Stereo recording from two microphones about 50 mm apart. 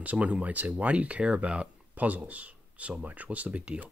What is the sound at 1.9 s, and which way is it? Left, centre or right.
Speech, right.